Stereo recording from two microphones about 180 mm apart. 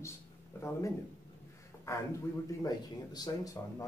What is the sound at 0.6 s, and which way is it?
Speech, 15° left (ahead or behind).